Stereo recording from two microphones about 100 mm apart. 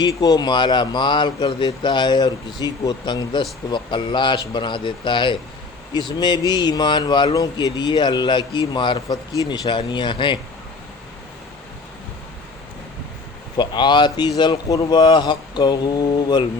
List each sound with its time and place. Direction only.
0.0 s speech: 40° left (ahead or behind)
7.3 s speech: 40° left (ahead or behind)
13.6 s speech: 50° left (ahead or behind)